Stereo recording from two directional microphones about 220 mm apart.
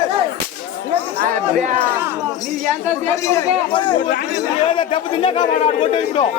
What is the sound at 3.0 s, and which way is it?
A man's voice, 15° left (ahead or behind).